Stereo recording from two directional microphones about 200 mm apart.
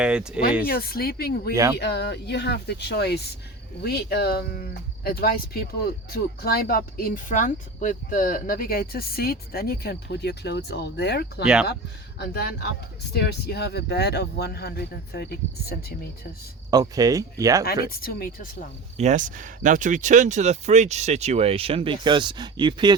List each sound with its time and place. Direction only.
0.0 s speech: 5° right (ahead or behind)
0.6 s speech: 50° left (ahead or behind)
16.7 s speech: 20° right (ahead or behind)
18.0 s speech: 45° left (ahead or behind)
18.9 s speech: 35° right (ahead or behind); by 23.0 s 20° right (ahead or behind)